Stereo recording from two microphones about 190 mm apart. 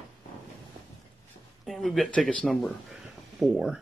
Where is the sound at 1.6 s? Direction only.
Centre (ahead or behind).